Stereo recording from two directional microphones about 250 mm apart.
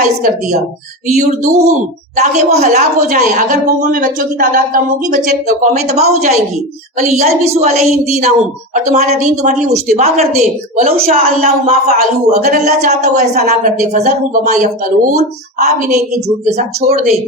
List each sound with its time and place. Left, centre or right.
1.2 s a woman's voice: right
10.9 s a woman's voice: right